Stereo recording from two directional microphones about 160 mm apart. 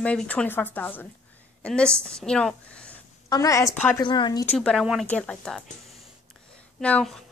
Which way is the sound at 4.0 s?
30° left (ahead or behind).